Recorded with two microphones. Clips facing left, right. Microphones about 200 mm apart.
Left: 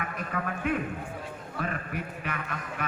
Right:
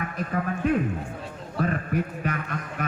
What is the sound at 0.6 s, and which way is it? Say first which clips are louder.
Speech: right 6 dB; 35° right (ahead or behind).